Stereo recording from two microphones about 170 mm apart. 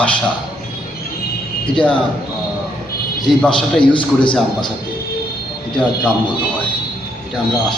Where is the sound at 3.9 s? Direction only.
30° left (ahead or behind).